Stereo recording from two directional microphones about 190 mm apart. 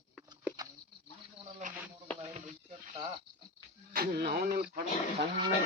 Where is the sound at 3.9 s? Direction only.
55° right (ahead or behind).